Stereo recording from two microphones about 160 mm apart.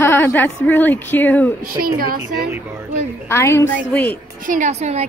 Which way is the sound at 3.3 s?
15° left (ahead or behind).